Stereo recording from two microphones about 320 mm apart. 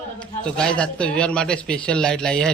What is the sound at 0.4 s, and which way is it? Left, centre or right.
Speech, centre.